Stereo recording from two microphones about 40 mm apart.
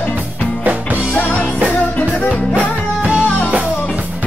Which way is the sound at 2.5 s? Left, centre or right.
Right.